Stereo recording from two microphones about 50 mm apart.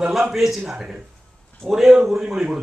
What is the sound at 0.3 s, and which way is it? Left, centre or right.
A man's voice, centre.